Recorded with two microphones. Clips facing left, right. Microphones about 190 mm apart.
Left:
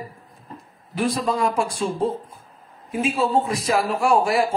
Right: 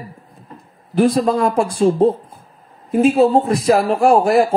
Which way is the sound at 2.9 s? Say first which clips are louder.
Right 10 dB; 35° right (ahead or behind).